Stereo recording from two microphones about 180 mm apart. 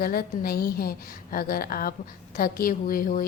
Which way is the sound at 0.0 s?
55° left (ahead or behind).